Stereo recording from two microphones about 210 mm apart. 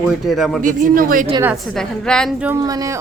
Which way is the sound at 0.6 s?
40° right (ahead or behind).